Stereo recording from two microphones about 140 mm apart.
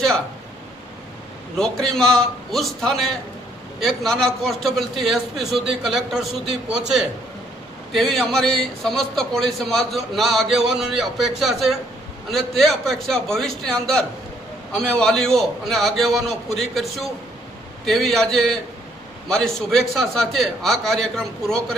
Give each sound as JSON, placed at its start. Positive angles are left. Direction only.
{"t": 1.5, "sound": "a man's voice", "side_deg": 5}